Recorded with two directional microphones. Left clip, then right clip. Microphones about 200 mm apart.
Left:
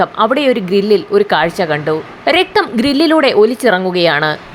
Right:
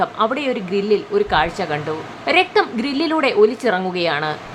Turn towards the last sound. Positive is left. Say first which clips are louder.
# left 8 dB
turn(degrees=25)  # may be behind; listen again after turning